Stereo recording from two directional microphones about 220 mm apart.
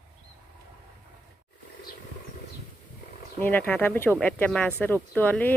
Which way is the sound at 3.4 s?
10° left (ahead or behind).